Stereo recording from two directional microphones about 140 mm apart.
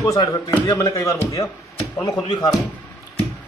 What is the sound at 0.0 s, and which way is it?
Speech, 25° left (ahead or behind).